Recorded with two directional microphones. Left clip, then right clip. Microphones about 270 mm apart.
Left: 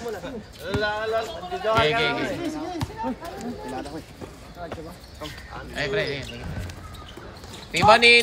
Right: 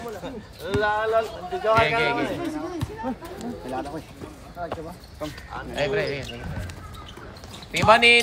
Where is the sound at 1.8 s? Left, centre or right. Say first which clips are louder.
Left 1 dB; centre.